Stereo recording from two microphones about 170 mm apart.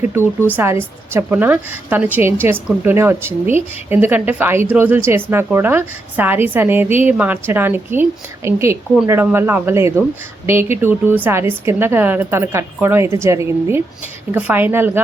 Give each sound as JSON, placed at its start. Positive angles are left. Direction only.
{"t": 0.1, "sound": "a woman's voice", "side_deg": -15}